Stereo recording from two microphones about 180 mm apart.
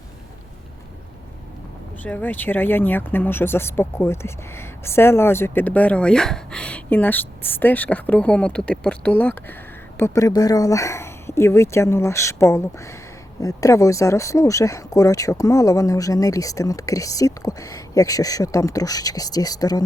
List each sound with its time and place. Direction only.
2.0 s speech: 10° left (ahead or behind)